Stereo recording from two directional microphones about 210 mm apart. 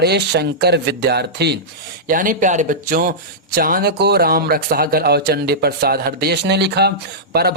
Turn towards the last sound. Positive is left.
turn(degrees=-50)  # may be behind; listen again after turning